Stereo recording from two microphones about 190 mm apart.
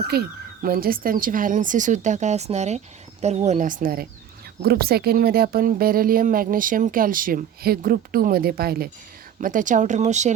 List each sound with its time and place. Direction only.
0.1 s speech: 55° right (ahead or behind); by 10.3 s 40° right (ahead or behind)